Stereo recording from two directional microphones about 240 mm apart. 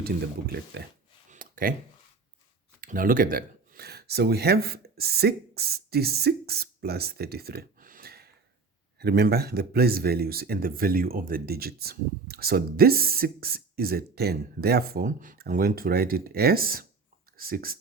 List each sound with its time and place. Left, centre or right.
0.7 s speech: right
1.3 s a sound: right
2.8 s speech: right